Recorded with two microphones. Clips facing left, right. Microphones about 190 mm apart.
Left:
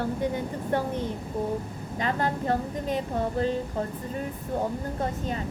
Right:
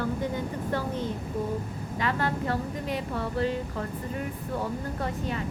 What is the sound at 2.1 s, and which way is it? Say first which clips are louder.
Speech: left 2 dB; 45° left (ahead or behind).